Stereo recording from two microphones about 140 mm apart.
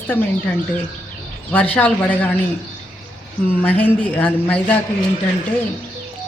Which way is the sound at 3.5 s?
10° left (ahead or behind).